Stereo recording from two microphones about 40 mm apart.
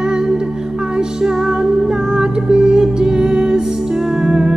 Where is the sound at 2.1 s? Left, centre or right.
Right.